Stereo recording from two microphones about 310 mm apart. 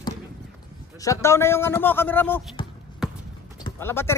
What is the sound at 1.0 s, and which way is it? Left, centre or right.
A man's voice, centre.